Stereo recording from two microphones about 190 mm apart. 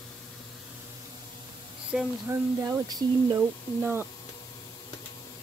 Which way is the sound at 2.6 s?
20° right (ahead or behind).